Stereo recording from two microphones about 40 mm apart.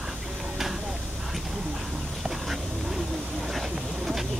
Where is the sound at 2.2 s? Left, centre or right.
Centre.